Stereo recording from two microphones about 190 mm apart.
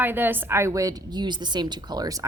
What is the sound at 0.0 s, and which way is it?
A woman's voice, 10° right (ahead or behind).